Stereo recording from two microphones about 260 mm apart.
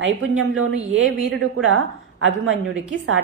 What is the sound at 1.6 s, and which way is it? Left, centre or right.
Speech, right.